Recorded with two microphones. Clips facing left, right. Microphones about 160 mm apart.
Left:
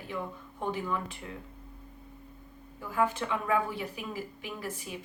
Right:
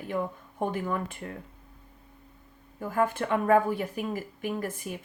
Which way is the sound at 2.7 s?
50° right (ahead or behind).